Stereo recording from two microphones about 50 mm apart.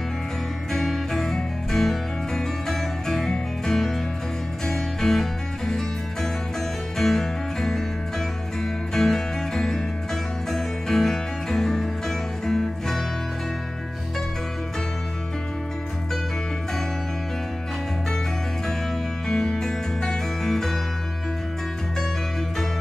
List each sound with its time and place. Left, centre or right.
0.7 s music: centre
8.9 s music: centre
19.2 s music: centre